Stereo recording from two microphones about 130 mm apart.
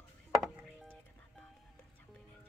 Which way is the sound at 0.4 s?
10° right (ahead or behind).